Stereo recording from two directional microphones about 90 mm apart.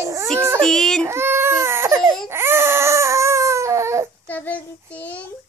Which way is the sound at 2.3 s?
30° right (ahead or behind).